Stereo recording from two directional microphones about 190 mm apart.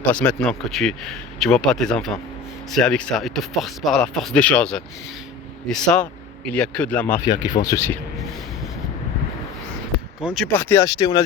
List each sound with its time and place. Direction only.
0.0 s a man's voice: 5° left (ahead or behind)
7.3 s speech: 20° left (ahead or behind)
10.2 s a man's voice: centre (ahead or behind)
10.6 s speech: 15° left (ahead or behind)